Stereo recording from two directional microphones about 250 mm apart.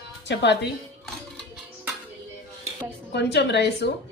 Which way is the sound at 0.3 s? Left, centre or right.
Left.